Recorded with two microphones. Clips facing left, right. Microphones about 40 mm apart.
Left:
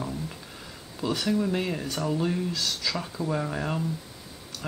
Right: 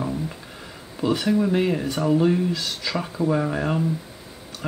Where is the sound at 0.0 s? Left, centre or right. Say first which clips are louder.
Right 6 dB; right.